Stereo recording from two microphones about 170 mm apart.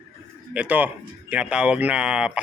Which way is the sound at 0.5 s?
10° right (ahead or behind).